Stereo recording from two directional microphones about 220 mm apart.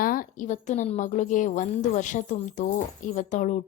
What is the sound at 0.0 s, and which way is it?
A woman's voice, 40° left (ahead or behind).